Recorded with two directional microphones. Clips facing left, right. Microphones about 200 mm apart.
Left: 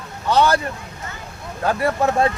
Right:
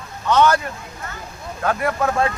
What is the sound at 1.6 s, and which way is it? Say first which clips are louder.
Speech: left 1 dB; 30° left (ahead or behind).